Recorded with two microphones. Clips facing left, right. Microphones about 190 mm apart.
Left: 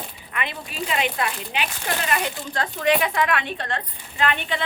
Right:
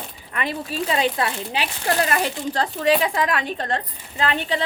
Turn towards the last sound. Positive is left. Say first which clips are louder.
# right 1 dB
turn(degrees=-35)  # may be behind; listen again after turning